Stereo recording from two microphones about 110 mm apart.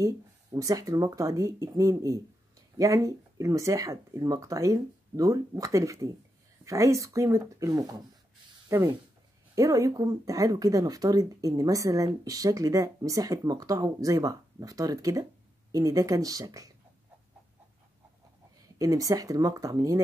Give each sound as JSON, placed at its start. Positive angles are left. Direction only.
{"t": 0.0, "sound": "speech", "side_deg": -30}
{"t": 18.8, "sound": "speech", "side_deg": -30}